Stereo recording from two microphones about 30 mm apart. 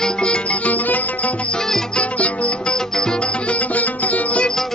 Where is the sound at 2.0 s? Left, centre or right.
Left.